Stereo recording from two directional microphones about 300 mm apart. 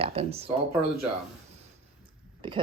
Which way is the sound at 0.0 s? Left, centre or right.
Centre.